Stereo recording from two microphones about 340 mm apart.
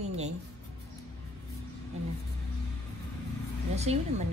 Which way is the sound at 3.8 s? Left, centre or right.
Centre.